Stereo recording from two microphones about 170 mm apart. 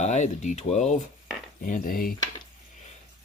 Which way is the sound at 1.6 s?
55° left (ahead or behind).